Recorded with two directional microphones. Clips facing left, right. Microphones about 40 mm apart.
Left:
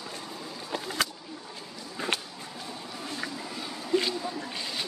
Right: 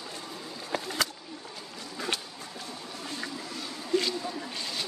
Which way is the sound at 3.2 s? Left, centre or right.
Centre.